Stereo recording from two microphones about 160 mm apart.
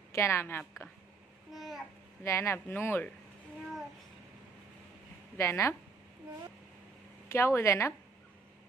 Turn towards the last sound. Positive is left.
turn(degrees=15)  # may be behind; listen again after turning